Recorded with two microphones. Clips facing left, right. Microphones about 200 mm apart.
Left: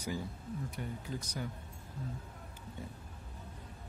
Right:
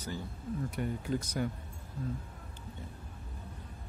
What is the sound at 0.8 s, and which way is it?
Speech, 65° right (ahead or behind).